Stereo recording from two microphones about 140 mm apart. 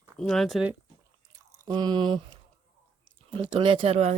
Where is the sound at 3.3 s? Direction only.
35° right (ahead or behind).